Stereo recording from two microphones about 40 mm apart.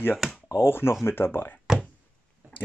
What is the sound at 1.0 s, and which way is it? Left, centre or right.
Speech, left.